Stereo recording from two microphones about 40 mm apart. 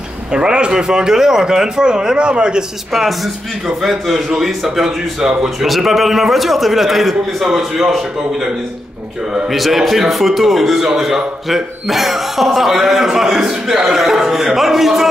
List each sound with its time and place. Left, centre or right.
0.3 s a man's voice: right
2.9 s a man's voice: centre
9.5 s a man's voice: centre